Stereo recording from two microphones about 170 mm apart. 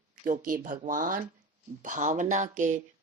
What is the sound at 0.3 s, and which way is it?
Speech, 55° right (ahead or behind).